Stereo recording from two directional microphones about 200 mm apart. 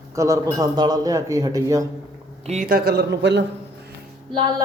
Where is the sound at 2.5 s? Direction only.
40° right (ahead or behind); by 3.4 s 55° right (ahead or behind).